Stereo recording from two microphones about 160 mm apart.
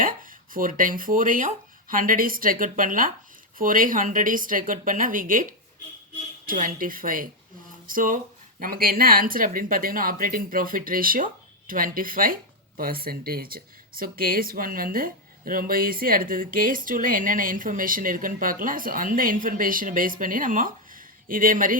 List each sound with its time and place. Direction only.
0.0 s speech: 60° right (ahead or behind)